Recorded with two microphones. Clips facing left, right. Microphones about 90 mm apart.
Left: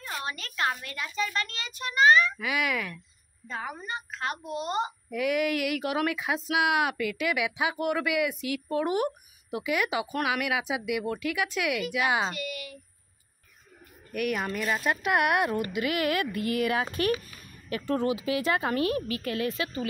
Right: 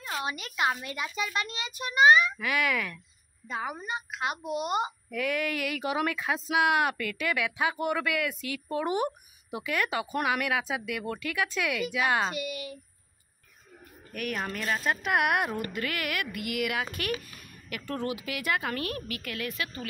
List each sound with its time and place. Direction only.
0.0 s speech: 15° right (ahead or behind)
2.3 s speech: 5° left (ahead or behind)
3.4 s speech: 10° right (ahead or behind)
5.1 s speech: 10° left (ahead or behind)
12.3 s speech: 20° right (ahead or behind)
14.1 s speech: 5° left (ahead or behind)
15.7 s speech: 20° left (ahead or behind)